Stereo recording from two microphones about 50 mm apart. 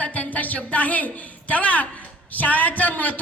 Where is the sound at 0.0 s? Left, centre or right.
Left.